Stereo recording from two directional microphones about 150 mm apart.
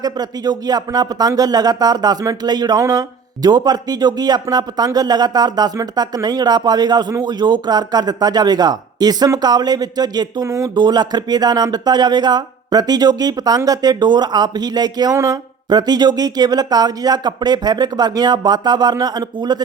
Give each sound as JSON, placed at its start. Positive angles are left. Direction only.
{"t": 0.0, "sound": "speech", "side_deg": -25}